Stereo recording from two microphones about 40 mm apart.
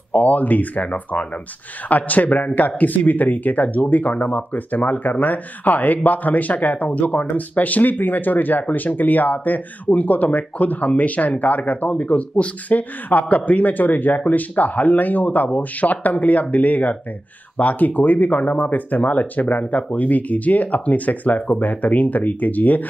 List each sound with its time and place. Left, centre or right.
0.1 s speech: left